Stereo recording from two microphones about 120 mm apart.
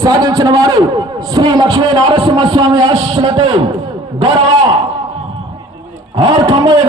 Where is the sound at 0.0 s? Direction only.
30° right (ahead or behind).